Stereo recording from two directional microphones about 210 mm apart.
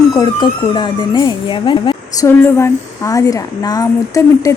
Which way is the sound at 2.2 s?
10° left (ahead or behind).